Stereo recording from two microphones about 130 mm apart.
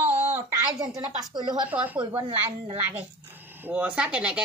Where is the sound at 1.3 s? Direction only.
35° right (ahead or behind).